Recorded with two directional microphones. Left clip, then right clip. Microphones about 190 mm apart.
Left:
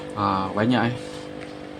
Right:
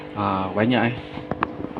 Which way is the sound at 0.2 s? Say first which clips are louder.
Right 1 dB; centre (ahead or behind).